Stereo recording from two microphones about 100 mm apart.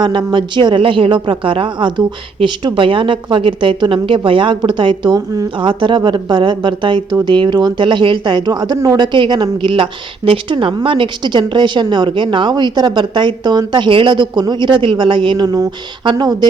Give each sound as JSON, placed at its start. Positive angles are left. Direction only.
{"t": 0.0, "sound": "speech", "side_deg": -50}
{"t": 5.5, "sound": "a woman's voice", "side_deg": -55}
{"t": 15.5, "sound": "a woman's voice", "side_deg": -40}